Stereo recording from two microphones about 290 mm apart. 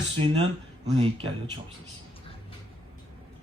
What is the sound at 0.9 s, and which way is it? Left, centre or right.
Speech, centre.